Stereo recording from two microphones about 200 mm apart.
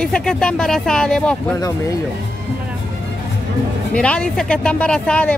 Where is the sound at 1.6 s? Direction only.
15° left (ahead or behind).